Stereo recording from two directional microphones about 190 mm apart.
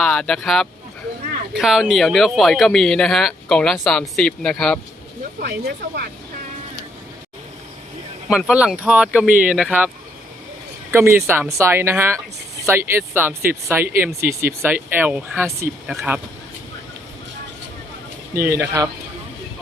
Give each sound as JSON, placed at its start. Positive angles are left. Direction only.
{"t": 0.0, "sound": "speech", "side_deg": 5}
{"t": 5.4, "sound": "speech", "side_deg": -55}
{"t": 8.3, "sound": "speech", "side_deg": 0}
{"t": 10.9, "sound": "speech", "side_deg": -10}
{"t": 18.3, "sound": "speech", "side_deg": -15}